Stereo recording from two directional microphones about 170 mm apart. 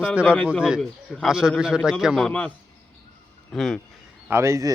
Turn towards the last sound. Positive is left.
turn(degrees=-15)  # may be behind; listen again after turning